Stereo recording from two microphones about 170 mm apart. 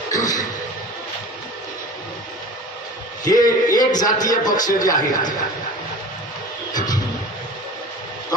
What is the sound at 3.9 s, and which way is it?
A woman's voice, 20° left (ahead or behind).